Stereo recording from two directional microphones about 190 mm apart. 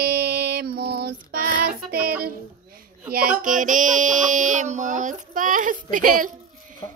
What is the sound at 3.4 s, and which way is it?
Speech, 45° right (ahead or behind).